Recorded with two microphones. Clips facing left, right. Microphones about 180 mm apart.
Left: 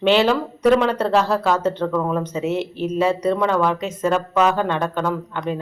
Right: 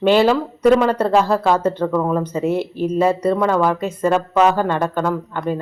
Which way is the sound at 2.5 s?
10° right (ahead or behind).